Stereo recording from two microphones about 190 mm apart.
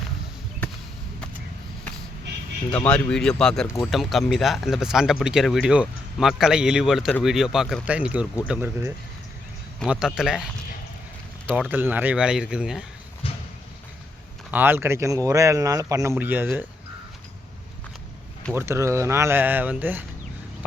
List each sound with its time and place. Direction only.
2.7 s a man's voice: 5° left (ahead or behind)
11.5 s speech: 10° right (ahead or behind)
13.2 s a sound: 30° left (ahead or behind)
14.5 s a man's voice: 10° right (ahead or behind)
18.5 s a man's voice: 15° right (ahead or behind)